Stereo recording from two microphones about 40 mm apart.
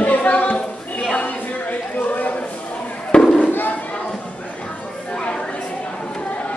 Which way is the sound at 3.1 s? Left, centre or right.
Left.